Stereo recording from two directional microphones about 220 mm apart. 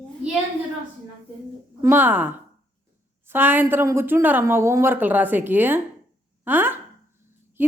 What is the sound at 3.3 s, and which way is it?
A woman's voice, 10° right (ahead or behind).